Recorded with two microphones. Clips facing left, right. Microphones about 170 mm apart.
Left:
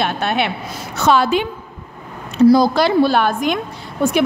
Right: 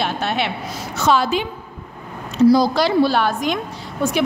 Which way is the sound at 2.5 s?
55° left (ahead or behind).